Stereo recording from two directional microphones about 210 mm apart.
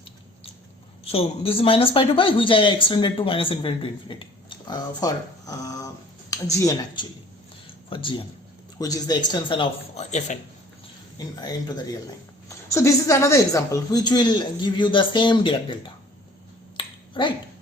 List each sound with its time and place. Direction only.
1.0 s speech: 30° left (ahead or behind)
11.2 s speech: 20° left (ahead or behind)
12.5 s speech: 15° left (ahead or behind)
16.7 s finger snapping: 25° left (ahead or behind)